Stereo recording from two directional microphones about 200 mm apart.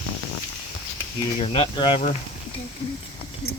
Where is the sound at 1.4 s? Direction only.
30° left (ahead or behind).